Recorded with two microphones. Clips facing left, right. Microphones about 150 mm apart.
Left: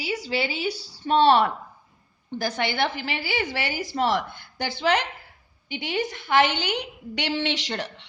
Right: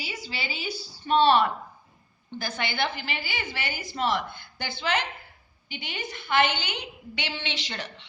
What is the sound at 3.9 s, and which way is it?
A woman's voice, 80° left.